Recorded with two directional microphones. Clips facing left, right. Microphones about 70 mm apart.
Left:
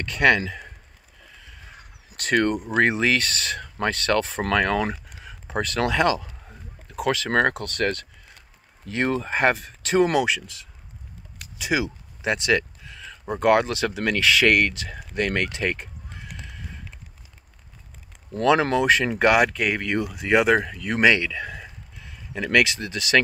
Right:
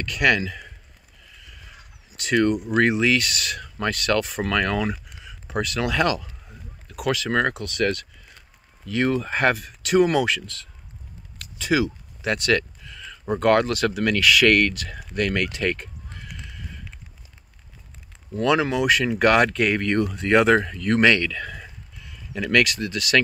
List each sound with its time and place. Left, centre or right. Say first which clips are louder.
0.0 s speech: left 2 dB; left
0.5 s a sound: left 1 dB; left
1.4 s speech: left 1 dB; left
5.9 s a sound: even; left
7.2 s speech: left 1 dB; left
18.4 s speech: left 1 dB; left
19.3 s speech: right 1 dB; centre; by 23.2 s left